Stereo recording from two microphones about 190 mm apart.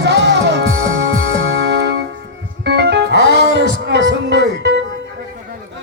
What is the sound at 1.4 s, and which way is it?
Music, 60° right (ahead or behind).